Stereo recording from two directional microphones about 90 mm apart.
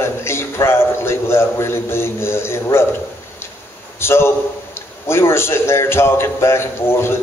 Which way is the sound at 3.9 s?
30° left (ahead or behind).